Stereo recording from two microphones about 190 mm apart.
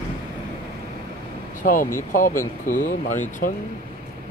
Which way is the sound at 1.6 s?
45° left (ahead or behind).